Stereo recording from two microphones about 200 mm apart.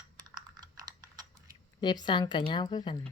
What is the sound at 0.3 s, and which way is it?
Computer keyboard, 20° right (ahead or behind).